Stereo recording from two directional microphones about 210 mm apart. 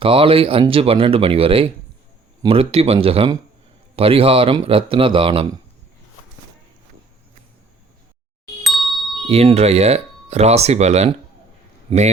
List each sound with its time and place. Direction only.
0.0 s speech: 25° right (ahead or behind)
8.6 s chime: centre (ahead or behind)
9.3 s speech: 30° right (ahead or behind)